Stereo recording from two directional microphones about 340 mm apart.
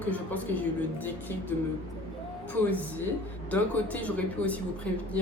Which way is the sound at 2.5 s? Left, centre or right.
Centre.